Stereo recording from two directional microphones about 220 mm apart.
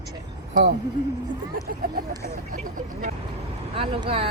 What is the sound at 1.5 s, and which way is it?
Speech, 40° right (ahead or behind).